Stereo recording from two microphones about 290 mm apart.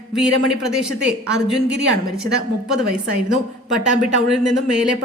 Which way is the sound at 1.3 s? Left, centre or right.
Right.